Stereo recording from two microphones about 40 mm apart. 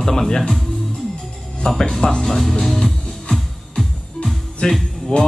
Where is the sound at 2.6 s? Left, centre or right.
Centre.